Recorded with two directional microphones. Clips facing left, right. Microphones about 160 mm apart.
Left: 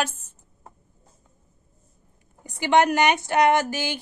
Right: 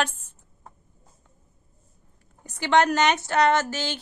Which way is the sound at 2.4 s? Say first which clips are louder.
Left 1 dB; 15° left (ahead or behind).